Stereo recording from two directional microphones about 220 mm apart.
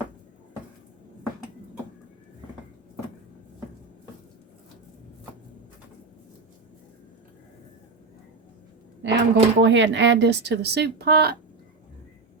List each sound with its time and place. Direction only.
9.0 s speech: 50° right (ahead or behind)